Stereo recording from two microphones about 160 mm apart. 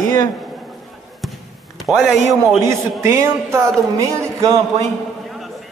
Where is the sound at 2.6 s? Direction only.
15° right (ahead or behind).